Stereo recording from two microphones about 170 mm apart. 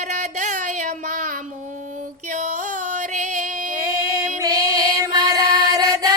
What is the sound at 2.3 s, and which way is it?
Music, 50° right (ahead or behind).